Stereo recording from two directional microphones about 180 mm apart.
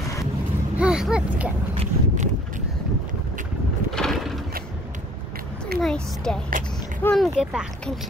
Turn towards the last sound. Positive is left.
turn(degrees=-5)  # may be behind; listen again after turning